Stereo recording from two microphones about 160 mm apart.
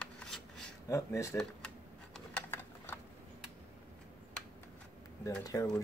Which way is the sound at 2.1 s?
10° left (ahead or behind).